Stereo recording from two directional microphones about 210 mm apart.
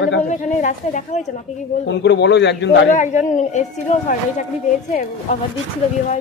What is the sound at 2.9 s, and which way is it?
A woman's voice, 35° left (ahead or behind).